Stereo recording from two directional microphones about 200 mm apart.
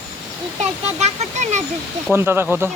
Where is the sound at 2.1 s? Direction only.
10° right (ahead or behind).